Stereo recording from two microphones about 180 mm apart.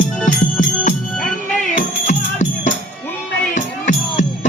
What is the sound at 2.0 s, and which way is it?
Music, 40° left (ahead or behind).